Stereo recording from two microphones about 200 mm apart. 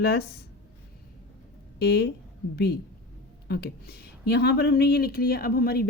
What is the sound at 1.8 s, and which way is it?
Speech, 55° left (ahead or behind).